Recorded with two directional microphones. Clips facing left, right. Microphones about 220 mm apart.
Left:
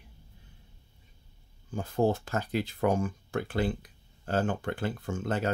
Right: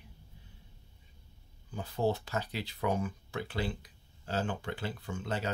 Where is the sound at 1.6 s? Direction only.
50° left (ahead or behind).